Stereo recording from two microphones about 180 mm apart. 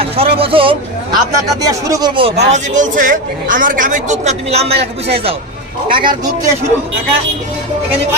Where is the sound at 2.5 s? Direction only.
40° right (ahead or behind).